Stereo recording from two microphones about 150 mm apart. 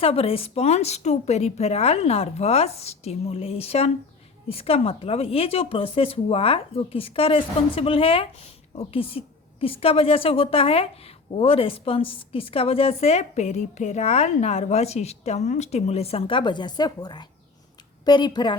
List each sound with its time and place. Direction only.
0.0 s a woman's voice: 40° left (ahead or behind)